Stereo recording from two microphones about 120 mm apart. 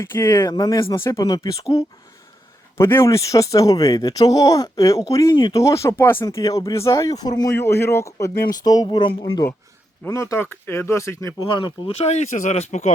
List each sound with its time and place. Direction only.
0.0 s speech: 20° left (ahead or behind)
0.5 s speech: 30° left (ahead or behind)
5.6 s speech: 25° left (ahead or behind)
7.5 s speech: 20° left (ahead or behind); by 9.5 s 35° left (ahead or behind)
10.0 s speech: 25° left (ahead or behind)
11.3 s speech: 40° left (ahead or behind)
11.9 s speech: 65° left (ahead or behind)